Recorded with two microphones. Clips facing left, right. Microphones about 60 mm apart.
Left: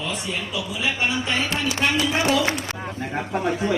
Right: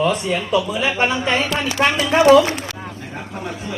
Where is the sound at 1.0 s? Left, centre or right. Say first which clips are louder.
Right 5 dB; right.